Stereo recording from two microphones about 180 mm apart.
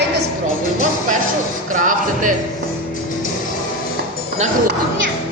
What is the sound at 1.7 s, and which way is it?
Music, 45° right (ahead or behind).